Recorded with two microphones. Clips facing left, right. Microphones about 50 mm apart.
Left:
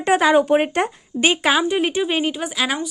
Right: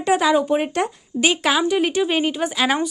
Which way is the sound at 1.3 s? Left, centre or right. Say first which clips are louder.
Even; centre.